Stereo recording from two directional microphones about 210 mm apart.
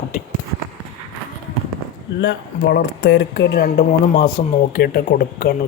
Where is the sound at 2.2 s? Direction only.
55° left (ahead or behind).